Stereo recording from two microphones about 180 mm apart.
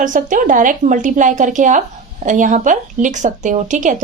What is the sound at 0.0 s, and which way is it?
Speech, 45° right (ahead or behind).